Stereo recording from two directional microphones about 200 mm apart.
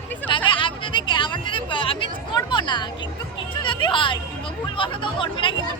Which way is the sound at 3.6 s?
25° left (ahead or behind).